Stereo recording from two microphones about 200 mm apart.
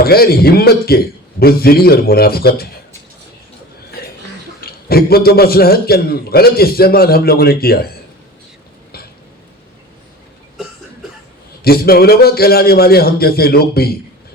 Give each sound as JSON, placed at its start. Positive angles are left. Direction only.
{"t": 0.0, "sound": "a man's voice", "side_deg": 50}
{"t": 4.6, "sound": "a man's voice", "side_deg": 50}
{"t": 11.6, "sound": "a man's voice", "side_deg": 50}